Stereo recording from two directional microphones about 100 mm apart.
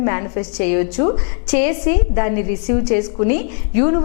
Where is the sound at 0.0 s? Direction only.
15° left (ahead or behind).